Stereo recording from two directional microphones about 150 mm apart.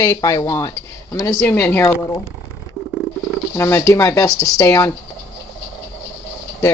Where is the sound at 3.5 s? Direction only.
20° left (ahead or behind).